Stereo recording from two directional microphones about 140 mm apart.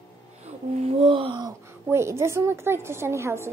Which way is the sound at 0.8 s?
45° right (ahead or behind).